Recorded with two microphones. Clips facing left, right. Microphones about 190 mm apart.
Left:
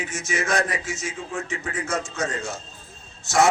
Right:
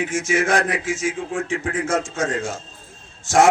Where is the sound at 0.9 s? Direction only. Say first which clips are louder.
Right 8 dB; 90° right.